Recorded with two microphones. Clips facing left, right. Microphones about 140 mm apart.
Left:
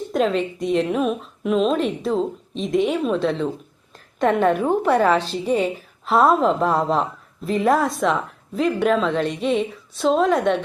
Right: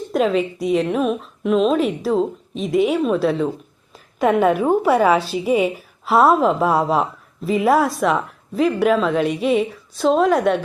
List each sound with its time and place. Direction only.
0.1 s a woman's voice: centre (ahead or behind)